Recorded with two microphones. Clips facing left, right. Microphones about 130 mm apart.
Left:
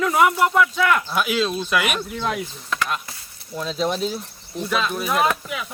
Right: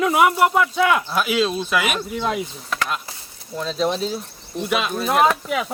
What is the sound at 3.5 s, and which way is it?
Speech, centre (ahead or behind).